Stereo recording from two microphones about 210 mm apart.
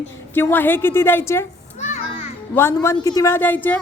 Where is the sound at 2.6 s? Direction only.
10° left (ahead or behind).